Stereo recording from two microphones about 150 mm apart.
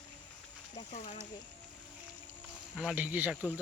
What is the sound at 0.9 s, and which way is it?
Speech, 50° left (ahead or behind).